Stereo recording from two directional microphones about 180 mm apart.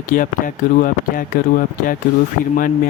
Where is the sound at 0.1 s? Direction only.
50° left (ahead or behind).